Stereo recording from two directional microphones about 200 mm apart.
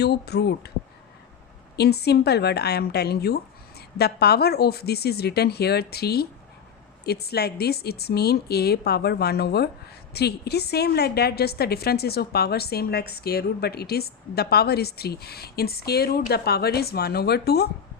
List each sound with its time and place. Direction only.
0.0 s speech: 55° left (ahead or behind)
1.7 s a woman's voice: 55° left (ahead or behind)